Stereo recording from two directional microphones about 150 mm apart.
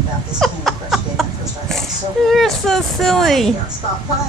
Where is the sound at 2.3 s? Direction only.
Centre (ahead or behind).